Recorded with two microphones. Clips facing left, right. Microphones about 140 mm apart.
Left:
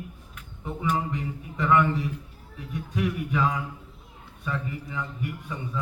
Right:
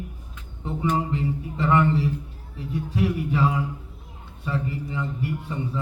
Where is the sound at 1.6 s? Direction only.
30° right (ahead or behind).